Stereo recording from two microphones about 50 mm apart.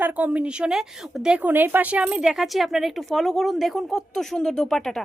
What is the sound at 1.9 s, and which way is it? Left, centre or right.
Speech, right.